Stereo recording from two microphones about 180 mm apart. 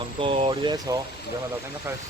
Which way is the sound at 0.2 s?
30° right (ahead or behind).